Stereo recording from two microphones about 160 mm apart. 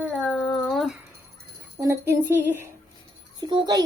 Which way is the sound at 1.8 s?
20° right (ahead or behind).